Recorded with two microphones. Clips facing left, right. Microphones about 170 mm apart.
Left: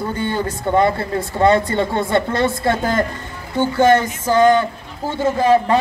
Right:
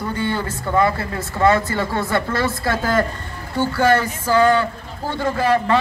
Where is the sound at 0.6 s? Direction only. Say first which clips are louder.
Left 2 dB; 25° left (ahead or behind).